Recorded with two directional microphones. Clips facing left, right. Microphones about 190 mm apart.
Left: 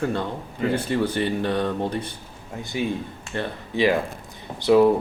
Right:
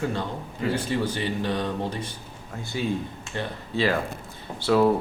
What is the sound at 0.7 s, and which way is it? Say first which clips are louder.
Speech: left 4 dB; 55° left (ahead or behind).